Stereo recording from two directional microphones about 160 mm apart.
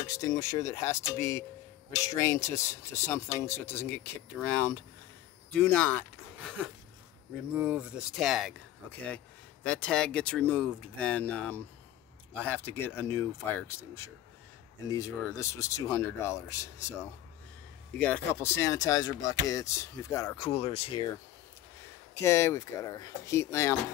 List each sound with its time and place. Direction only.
0.0 s speech: 20° left (ahead or behind)
2.4 s speech: 20° left (ahead or behind)
7.5 s speech: 10° right (ahead or behind); by 16.9 s 15° left (ahead or behind)
17.9 s speech: 10° left (ahead or behind)
20.3 s speech: 35° left (ahead or behind)
22.1 s speech: 15° left (ahead or behind)